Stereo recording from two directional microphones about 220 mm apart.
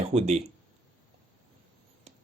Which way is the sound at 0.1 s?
30° right (ahead or behind).